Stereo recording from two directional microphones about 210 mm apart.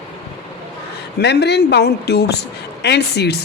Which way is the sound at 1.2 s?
55° left (ahead or behind).